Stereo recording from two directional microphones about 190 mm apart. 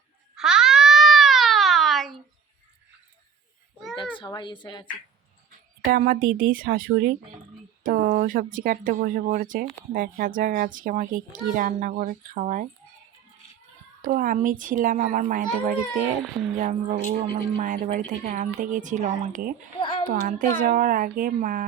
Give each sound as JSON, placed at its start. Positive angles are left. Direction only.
{"t": 0.3, "sound": "a sound", "side_deg": -5}
{"t": 4.2, "sound": "a woman's voice", "side_deg": 25}
{"t": 5.8, "sound": "a child's voice", "side_deg": -50}
{"t": 14.0, "sound": "a child's voice", "side_deg": -45}
{"t": 19.8, "sound": "a sound", "side_deg": 30}
{"t": 20.1, "sound": "a child's voice", "side_deg": -45}